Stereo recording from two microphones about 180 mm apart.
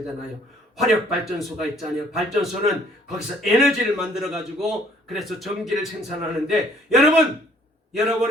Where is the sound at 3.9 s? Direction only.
Centre (ahead or behind).